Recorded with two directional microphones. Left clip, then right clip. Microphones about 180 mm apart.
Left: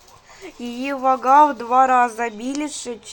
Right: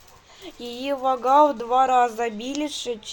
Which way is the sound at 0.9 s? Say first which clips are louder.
Left 4 dB; 5° left (ahead or behind).